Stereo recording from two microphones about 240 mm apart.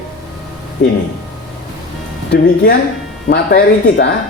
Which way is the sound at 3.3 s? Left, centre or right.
Left.